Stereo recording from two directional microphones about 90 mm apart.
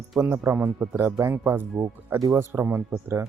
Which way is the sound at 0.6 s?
20° right (ahead or behind).